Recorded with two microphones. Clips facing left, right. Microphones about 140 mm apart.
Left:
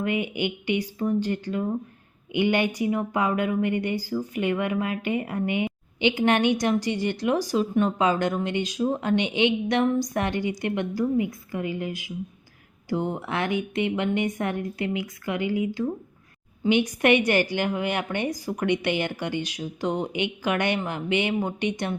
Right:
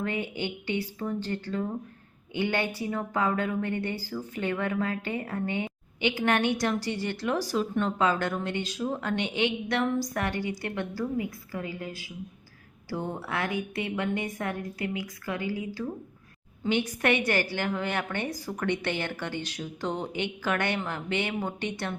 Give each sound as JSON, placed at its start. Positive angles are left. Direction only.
{"t": 0.0, "sound": "speech", "side_deg": 15}